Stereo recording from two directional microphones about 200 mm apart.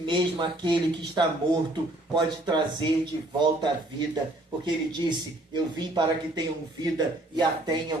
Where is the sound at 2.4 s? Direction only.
20° right (ahead or behind).